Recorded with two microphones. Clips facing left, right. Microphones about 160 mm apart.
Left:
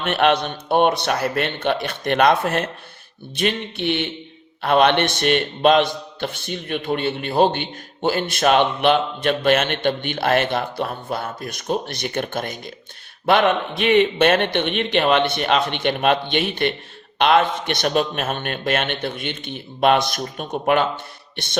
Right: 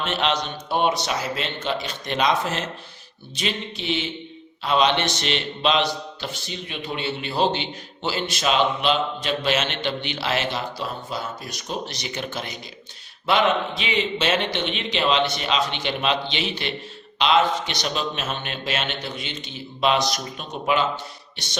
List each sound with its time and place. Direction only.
0.0 s a man's voice: 55° left (ahead or behind)